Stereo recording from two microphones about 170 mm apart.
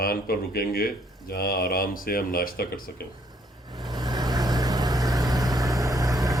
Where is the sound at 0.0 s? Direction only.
65° left (ahead or behind).